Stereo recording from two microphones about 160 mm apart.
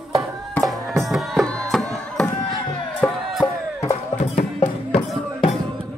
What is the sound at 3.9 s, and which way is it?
Music, 50° left (ahead or behind).